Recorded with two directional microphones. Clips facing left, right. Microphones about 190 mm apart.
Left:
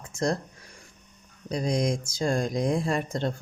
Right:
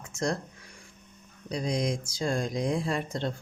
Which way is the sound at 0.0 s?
35° left (ahead or behind).